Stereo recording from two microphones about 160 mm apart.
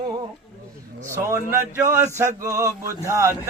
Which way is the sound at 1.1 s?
15° right (ahead or behind).